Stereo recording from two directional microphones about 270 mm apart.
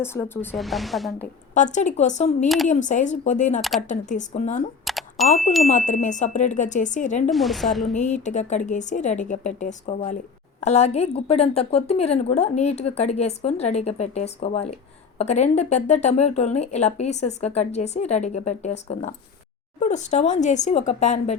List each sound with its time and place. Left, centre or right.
0.0 s speech: centre
1.5 s speech: left
4.9 s a sound: centre
5.4 s speech: centre
5.6 s speech: left
7.3 s speech: centre
7.9 s speech: left
19.8 s speech: left